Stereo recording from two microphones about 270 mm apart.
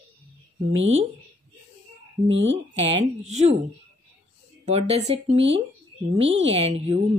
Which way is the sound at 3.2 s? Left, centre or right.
Right.